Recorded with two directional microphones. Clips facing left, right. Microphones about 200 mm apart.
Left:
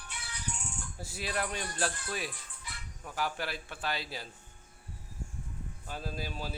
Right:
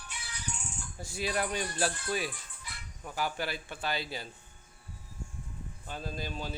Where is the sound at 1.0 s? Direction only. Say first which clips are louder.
Right 3 dB; 5° left (ahead or behind).